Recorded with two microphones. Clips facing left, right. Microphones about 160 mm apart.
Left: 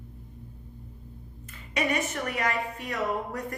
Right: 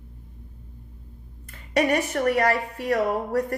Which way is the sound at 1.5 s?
60° right (ahead or behind).